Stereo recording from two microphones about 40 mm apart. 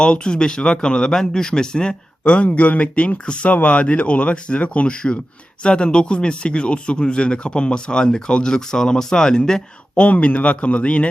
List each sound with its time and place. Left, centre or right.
0.0 s speech: left
10.1 s speech: left